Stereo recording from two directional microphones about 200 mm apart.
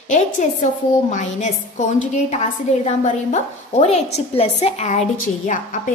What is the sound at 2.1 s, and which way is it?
A woman's voice, 35° left (ahead or behind).